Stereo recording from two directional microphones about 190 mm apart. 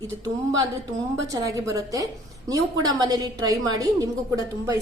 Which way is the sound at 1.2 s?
15° right (ahead or behind).